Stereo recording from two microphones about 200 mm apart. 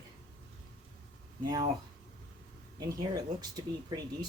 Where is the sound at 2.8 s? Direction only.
20° right (ahead or behind).